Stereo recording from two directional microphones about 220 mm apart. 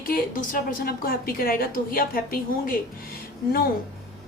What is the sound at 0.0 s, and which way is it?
A woman's voice, 40° left (ahead or behind).